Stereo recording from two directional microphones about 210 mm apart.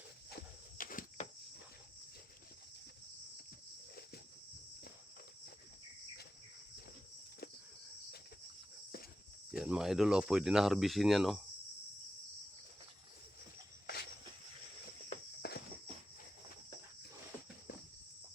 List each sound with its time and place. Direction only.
0.8 s a sound: 40° left (ahead or behind)
9.5 s speech: 5° right (ahead or behind)
13.8 s cricket: 50° left (ahead or behind)
15.4 s walk: 50° left (ahead or behind)